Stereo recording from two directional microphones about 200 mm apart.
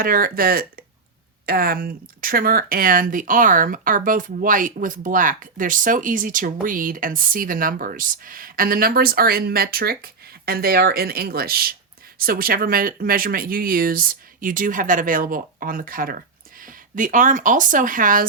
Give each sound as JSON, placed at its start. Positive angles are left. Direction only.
{"t": 0.0, "sound": "speech", "side_deg": -45}